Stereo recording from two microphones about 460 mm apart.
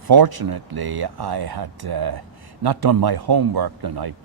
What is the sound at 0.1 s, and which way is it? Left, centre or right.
Speech, right.